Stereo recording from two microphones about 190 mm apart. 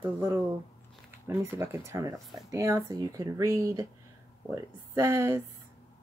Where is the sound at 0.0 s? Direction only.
15° right (ahead or behind).